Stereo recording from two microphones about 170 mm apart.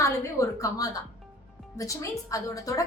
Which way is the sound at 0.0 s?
20° left (ahead or behind).